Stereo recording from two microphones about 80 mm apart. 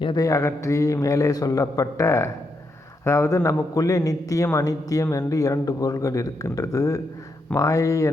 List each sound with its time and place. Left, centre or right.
0.2 s a man's voice: left